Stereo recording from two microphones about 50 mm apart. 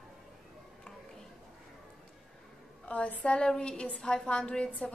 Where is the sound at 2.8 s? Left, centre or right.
Left.